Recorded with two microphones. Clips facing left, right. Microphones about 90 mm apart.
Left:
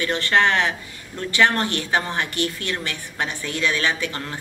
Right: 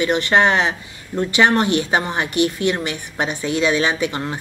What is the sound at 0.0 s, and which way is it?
Speech, 20° right (ahead or behind).